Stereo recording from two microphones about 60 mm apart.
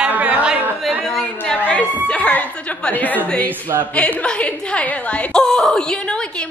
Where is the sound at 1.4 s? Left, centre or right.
Left.